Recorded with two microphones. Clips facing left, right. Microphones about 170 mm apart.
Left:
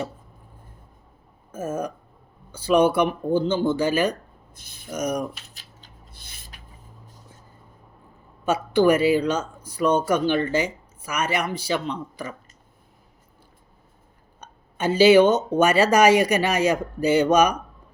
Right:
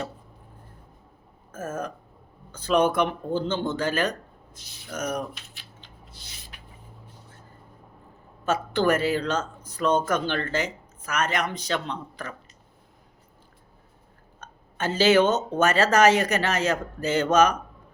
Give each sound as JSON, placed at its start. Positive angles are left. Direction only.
{"t": 1.5, "sound": "speech", "side_deg": 15}
{"t": 4.5, "sound": "speech", "side_deg": 55}
{"t": 4.9, "sound": "speech", "side_deg": 10}
{"t": 6.1, "sound": "a sound", "side_deg": 55}
{"t": 8.4, "sound": "speech", "side_deg": 10}
{"t": 14.4, "sound": "speech", "side_deg": 15}